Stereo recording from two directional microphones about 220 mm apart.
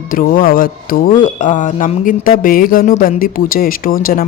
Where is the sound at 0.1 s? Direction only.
40° left (ahead or behind).